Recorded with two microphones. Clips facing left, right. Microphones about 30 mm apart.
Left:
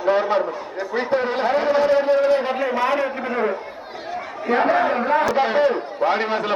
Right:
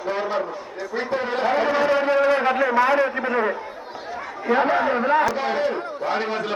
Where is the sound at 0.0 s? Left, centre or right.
Centre.